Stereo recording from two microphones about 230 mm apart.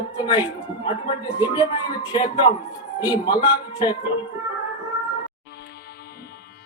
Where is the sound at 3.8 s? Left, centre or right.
Centre.